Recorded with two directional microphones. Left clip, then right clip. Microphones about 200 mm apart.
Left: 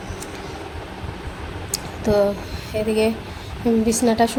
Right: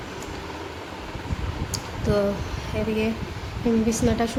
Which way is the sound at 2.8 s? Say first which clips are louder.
Left 6 dB; 20° left (ahead or behind).